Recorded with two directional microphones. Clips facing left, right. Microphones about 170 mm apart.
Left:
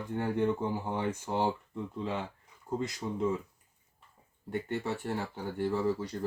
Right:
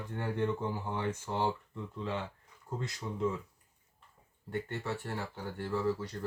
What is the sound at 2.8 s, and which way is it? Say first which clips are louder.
Speech: left 3 dB; 15° left (ahead or behind).